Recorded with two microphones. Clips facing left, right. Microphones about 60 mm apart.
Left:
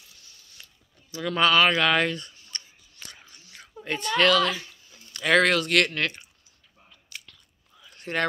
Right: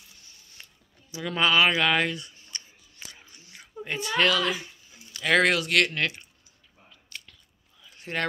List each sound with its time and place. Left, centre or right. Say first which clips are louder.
0.1 s mechanisms: even; right
1.1 s speech: left 2 dB; centre
2.5 s scissors: left 1 dB; centre
3.3 s chewing: left 1 dB; centre
3.8 s a child's voice: left 2 dB; centre
5.1 s speech: left 1 dB; centre
7.1 s biting: even; centre
7.9 s a sound: left 3 dB; centre